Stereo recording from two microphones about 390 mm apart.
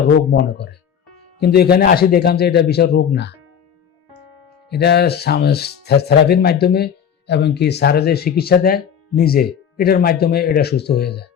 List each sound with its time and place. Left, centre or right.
0.3 s speech: left
4.7 s speech: left